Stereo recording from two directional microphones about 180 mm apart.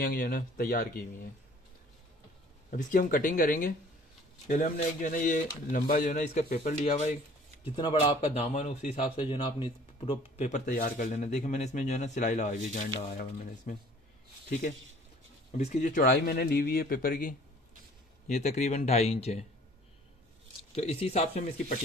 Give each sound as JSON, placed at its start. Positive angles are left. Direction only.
{"t": 0.0, "sound": "speech", "side_deg": 50}
{"t": 2.7, "sound": "speech", "side_deg": 50}
{"t": 7.6, "sound": "a man's voice", "side_deg": 25}
{"t": 15.5, "sound": "a man's voice", "side_deg": 40}
{"t": 20.7, "sound": "a man's voice", "side_deg": 35}